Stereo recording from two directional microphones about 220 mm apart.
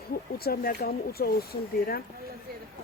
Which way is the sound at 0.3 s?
45° left (ahead or behind).